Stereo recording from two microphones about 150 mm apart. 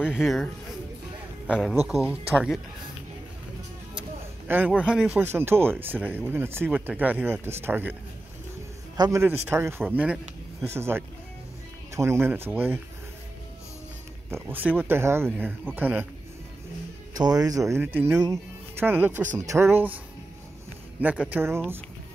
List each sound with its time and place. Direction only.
0.0 s speech: 5° right (ahead or behind)
1.9 s speech: 5° right (ahead or behind)
4.5 s speech: 10° right (ahead or behind)
5.2 s speech: 15° right (ahead or behind)
8.9 s a man's voice: 30° right (ahead or behind)
9.2 s speech: 15° right (ahead or behind)
14.3 s speech: 10° right (ahead or behind)
17.1 s speech: 25° right (ahead or behind)
21.0 s speech: 10° right (ahead or behind)